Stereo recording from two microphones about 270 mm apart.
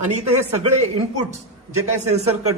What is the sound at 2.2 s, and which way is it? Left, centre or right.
Speech, right.